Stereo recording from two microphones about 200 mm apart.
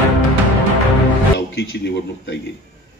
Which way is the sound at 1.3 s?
60° left (ahead or behind).